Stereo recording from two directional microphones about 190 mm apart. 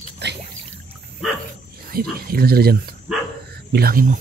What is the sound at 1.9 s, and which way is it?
Speech, 50° right (ahead or behind).